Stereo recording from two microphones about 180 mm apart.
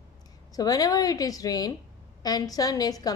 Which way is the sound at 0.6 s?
20° left (ahead or behind).